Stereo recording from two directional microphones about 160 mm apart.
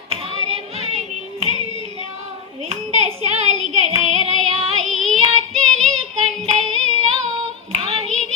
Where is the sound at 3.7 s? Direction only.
45° right (ahead or behind).